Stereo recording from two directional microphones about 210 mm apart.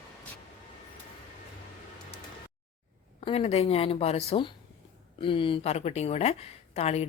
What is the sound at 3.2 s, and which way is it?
A woman's voice, 30° left (ahead or behind).